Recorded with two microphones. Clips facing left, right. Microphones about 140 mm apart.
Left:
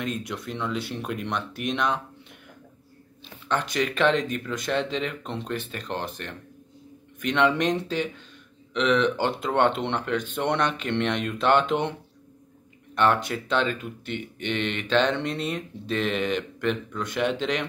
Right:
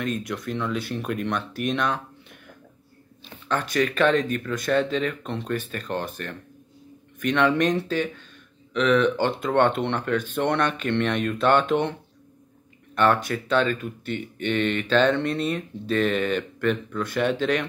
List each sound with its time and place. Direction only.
0.0 s speech: 25° left (ahead or behind)
3.6 s speech: 20° left (ahead or behind)
7.2 s speech: 20° left (ahead or behind)
12.9 s speech: 20° left (ahead or behind)